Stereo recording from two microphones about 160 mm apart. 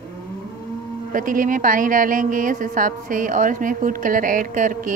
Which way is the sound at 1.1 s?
55° right (ahead or behind).